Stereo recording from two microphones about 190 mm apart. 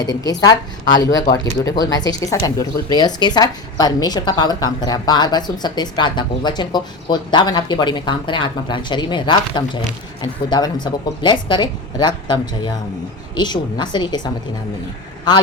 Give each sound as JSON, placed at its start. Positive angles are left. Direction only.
{"t": 0.0, "sound": "a woman's voice", "side_deg": 20}